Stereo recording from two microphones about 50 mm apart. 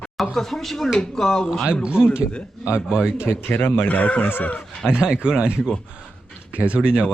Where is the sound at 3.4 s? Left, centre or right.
Left.